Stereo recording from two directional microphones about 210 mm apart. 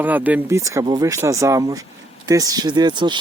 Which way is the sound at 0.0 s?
10° right (ahead or behind).